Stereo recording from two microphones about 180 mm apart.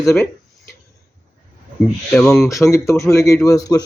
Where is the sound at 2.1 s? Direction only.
15° left (ahead or behind).